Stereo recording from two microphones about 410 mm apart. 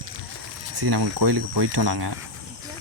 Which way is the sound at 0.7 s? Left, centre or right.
Right.